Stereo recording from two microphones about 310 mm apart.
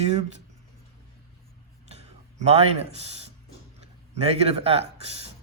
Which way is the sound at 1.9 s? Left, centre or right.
Centre.